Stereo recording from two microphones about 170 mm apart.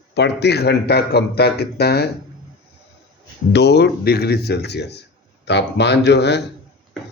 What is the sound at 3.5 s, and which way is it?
Speech, 80° left.